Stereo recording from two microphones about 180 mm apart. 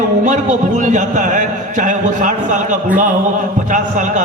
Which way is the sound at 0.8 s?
45° right (ahead or behind).